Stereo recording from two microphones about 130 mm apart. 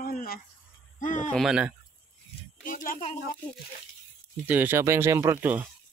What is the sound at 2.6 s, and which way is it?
Speech, 90° left.